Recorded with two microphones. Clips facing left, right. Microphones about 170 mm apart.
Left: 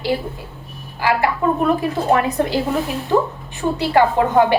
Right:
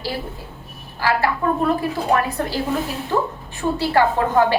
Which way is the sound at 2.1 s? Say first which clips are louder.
Left 4 dB; 20° left (ahead or behind).